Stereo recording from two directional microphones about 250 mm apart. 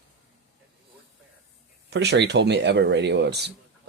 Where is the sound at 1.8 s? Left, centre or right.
Right.